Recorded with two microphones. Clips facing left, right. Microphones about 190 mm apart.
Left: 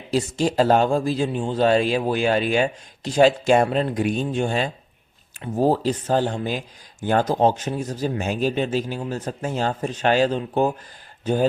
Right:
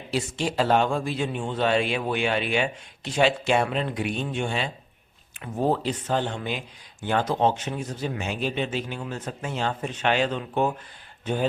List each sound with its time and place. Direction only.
0.1 s speech: 40° left (ahead or behind)